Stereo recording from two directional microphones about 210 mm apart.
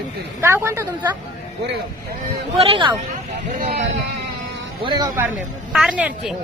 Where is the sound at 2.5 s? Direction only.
25° right (ahead or behind).